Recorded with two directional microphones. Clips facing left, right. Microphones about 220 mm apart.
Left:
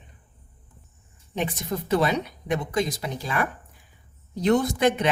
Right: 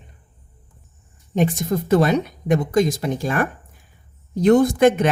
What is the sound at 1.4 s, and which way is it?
Speech, 45° right (ahead or behind).